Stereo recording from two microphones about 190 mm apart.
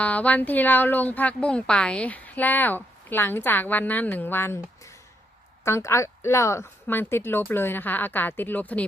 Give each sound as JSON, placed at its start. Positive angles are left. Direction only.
{"t": 0.0, "sound": "speech", "side_deg": 10}